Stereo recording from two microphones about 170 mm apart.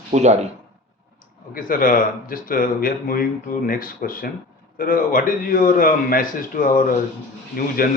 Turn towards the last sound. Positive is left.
turn(degrees=60)  # may be behind; listen again after turning